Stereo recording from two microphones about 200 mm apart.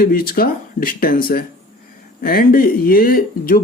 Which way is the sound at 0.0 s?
45° left (ahead or behind).